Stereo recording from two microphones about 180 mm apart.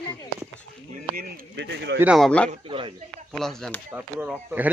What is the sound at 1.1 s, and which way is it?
Speech, 55° right (ahead or behind).